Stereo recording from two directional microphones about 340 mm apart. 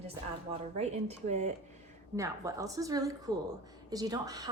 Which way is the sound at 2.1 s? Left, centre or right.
Centre.